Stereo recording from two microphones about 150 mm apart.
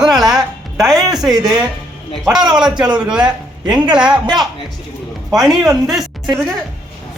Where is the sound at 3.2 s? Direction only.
30° right (ahead or behind).